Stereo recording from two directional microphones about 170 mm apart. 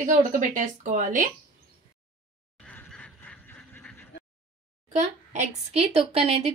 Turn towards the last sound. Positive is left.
turn(degrees=-35)  # may be behind; listen again after turning